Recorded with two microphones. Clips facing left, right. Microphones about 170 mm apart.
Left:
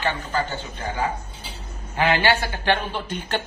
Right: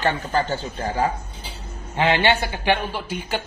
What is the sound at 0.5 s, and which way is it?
Speech, 35° right (ahead or behind).